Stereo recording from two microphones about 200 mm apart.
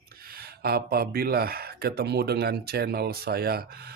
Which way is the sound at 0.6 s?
50° right (ahead or behind).